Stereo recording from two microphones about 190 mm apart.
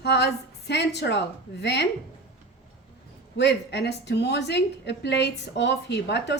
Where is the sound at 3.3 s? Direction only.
65° left (ahead or behind).